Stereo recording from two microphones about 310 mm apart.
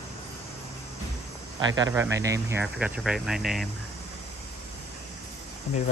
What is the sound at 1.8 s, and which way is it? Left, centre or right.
Speech, centre.